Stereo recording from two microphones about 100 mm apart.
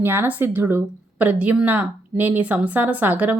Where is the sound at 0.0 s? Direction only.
20° right (ahead or behind).